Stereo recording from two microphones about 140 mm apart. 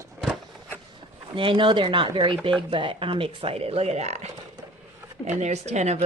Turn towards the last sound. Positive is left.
turn(degrees=-55)  # may be behind; listen again after turning